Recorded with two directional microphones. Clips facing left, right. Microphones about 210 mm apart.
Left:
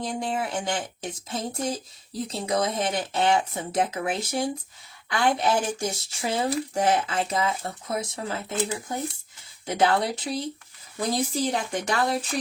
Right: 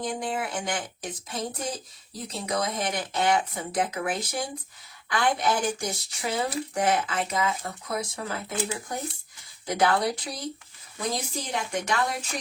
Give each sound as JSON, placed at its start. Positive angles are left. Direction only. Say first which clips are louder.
{"t": 0.0, "sound": "speech", "louder": "left 1 dB", "side_deg": 25}